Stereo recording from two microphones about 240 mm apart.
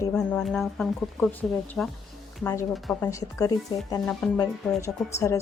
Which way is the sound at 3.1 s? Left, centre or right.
Centre.